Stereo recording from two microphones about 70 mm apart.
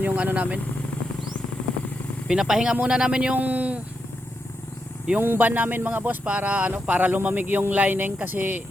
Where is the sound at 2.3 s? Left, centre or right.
Centre.